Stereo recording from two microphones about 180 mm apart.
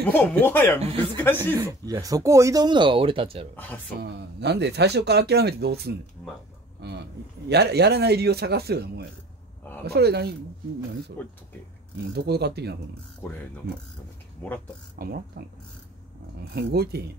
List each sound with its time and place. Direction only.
0.1 s speech: 10° left (ahead or behind)
1.4 s speech: 20° right (ahead or behind)
3.5 s speech: 10° left (ahead or behind)
4.0 s speech: 70° right (ahead or behind)
11.2 s speech: 10° left (ahead or behind)
12.0 s speech: 65° right (ahead or behind)
15.0 s speech: 60° right (ahead or behind)
16.5 s speech: 65° right (ahead or behind)